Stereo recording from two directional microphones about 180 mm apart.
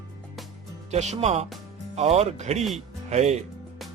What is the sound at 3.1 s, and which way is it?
Speech, 40° right (ahead or behind).